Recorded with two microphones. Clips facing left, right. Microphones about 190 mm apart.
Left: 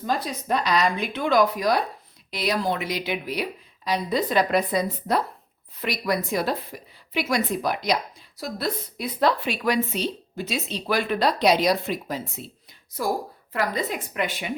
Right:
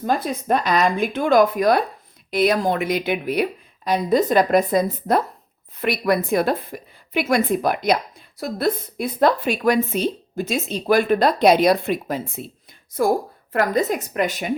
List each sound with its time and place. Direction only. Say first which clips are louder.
0.0 s a woman's voice: right 5 dB; 55° right (ahead or behind)